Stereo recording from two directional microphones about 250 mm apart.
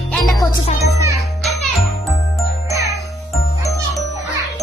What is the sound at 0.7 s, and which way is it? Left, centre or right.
Music, left.